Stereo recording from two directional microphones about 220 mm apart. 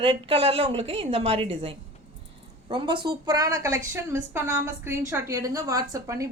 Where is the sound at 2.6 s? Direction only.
20° right (ahead or behind).